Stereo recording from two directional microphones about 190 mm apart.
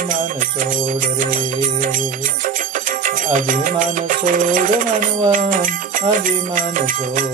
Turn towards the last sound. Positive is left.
turn(degrees=-45)  # may be behind; listen again after turning